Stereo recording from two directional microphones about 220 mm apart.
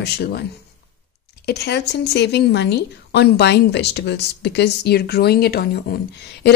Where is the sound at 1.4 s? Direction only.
50° left (ahead or behind).